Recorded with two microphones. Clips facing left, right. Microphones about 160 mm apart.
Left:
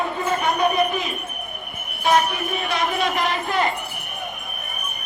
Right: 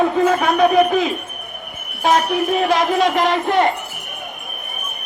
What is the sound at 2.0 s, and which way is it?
Speech, 90° right.